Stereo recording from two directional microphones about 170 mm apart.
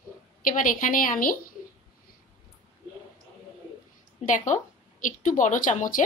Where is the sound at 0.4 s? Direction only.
55° left (ahead or behind).